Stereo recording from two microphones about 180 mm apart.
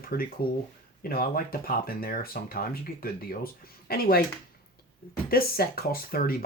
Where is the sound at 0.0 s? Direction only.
55° left (ahead or behind).